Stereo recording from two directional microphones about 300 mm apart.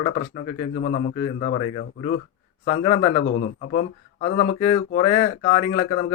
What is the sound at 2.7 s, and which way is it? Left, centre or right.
Speech, left.